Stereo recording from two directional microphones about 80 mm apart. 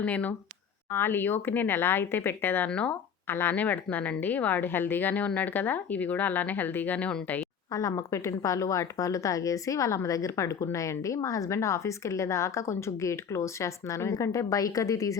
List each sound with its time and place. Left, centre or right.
0.0 s a woman's voice: centre
2.6 s speech: centre
3.2 s a woman's voice: left
7.7 s speech: left